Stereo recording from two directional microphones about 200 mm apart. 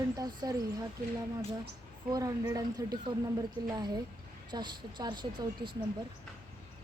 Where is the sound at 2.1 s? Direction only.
20° right (ahead or behind).